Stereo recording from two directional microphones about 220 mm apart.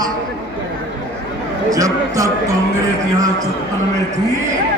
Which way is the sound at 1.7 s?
15° right (ahead or behind).